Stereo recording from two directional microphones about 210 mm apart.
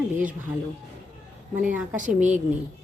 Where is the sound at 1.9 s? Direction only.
35° right (ahead or behind).